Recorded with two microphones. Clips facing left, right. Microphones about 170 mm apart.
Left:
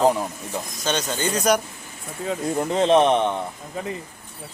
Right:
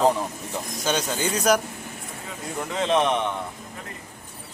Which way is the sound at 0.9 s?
5° right (ahead or behind).